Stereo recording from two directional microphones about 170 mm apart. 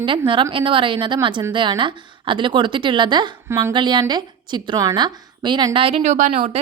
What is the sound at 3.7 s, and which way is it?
A woman's voice, 25° right (ahead or behind).